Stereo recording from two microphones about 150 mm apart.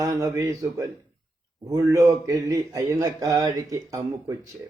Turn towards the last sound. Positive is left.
turn(degrees=-25)  # may be behind; listen again after turning